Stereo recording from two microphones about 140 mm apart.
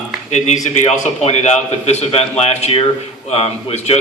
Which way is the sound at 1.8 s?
50° left (ahead or behind).